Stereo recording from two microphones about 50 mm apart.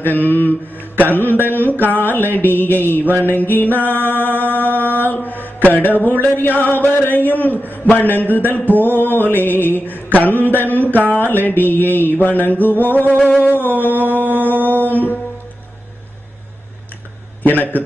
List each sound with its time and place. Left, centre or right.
0.0 s mantra: left
14.7 s music: left
17.4 s a man's voice: left